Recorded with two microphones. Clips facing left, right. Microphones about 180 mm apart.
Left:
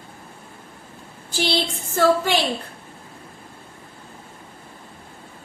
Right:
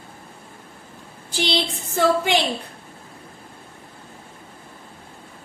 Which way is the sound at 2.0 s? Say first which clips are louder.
Left 1 dB; 20° right (ahead or behind).